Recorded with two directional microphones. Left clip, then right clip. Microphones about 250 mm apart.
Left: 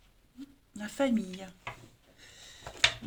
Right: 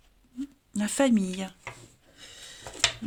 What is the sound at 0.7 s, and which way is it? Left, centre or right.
Speech, right.